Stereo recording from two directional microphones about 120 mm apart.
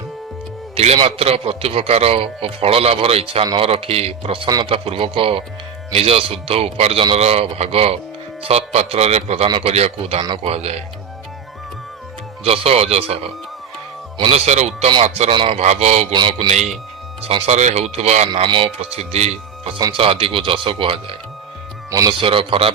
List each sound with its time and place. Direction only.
1.0 s a man's voice: 55° right (ahead or behind)
12.5 s a man's voice: 60° right (ahead or behind)
15.3 s speech: 40° right (ahead or behind)
15.5 s a man's voice: 65° right (ahead or behind)
16.1 s a man's voice: 40° right (ahead or behind)
17.2 s a man's voice: 60° right (ahead or behind)
18.4 s speech: 45° right (ahead or behind)
18.8 s a man's voice: 60° right (ahead or behind)
19.7 s speech: 45° right (ahead or behind)
21.8 s speech: 30° right (ahead or behind)
22.2 s speech: 45° right (ahead or behind)